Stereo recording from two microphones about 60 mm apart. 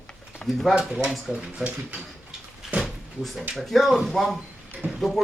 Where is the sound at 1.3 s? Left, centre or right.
Centre.